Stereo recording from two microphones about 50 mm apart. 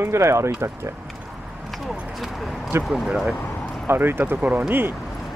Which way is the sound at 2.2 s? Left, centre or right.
Centre.